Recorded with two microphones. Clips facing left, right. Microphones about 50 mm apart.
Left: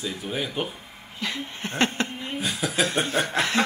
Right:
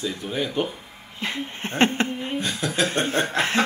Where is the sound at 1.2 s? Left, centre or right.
Right.